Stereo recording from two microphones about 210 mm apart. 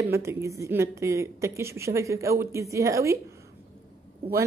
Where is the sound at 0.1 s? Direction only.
15° right (ahead or behind).